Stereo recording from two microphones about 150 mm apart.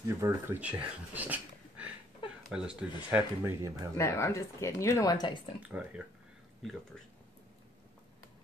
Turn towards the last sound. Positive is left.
turn(degrees=0)  # may be behind; listen again after turning